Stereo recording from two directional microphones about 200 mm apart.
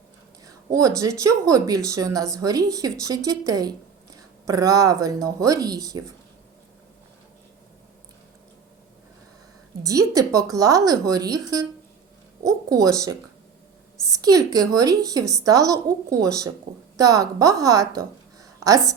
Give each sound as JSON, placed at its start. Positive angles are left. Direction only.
{"t": 0.4, "sound": "a sound", "side_deg": -15}
{"t": 1.2, "sound": "speech", "side_deg": -15}
{"t": 9.8, "sound": "speech", "side_deg": -15}
{"t": 14.2, "sound": "speech", "side_deg": -20}